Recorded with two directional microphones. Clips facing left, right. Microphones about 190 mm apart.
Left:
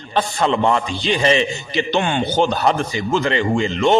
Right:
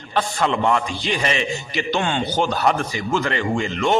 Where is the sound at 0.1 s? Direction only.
25° left (ahead or behind).